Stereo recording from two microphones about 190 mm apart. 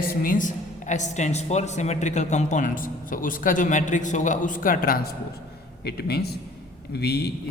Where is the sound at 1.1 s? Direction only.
35° left (ahead or behind).